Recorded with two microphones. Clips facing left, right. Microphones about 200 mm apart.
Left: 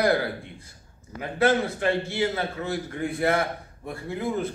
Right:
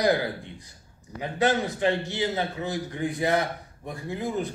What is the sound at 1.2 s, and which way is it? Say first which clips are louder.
A man's voice: left 2 dB; 15° right (ahead or behind).